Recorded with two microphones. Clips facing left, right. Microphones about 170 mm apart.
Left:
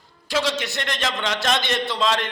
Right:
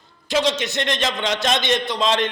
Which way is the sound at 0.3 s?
20° right (ahead or behind).